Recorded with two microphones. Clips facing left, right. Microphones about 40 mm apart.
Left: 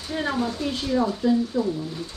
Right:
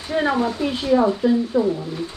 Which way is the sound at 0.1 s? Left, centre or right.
Right.